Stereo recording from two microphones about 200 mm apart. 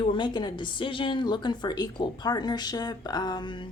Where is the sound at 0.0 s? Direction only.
25° left (ahead or behind).